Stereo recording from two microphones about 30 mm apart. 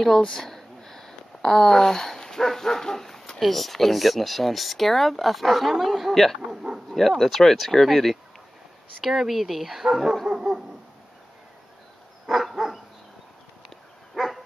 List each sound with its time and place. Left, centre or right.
0.0 s a sound: centre
3.3 s speech: centre
6.9 s speech: centre
9.3 s speech: centre
10.2 s dog: right
12.3 s dog: centre
14.2 s dog: centre